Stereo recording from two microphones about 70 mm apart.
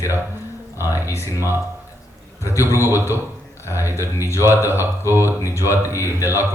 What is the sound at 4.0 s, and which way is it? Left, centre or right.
Speech, left.